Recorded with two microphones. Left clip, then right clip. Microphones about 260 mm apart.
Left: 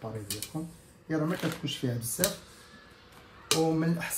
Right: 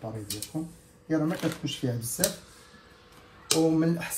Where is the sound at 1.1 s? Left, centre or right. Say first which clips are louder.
Right 3 dB; centre.